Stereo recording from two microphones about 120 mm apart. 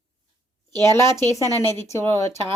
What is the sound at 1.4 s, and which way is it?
Speech, 30° right (ahead or behind).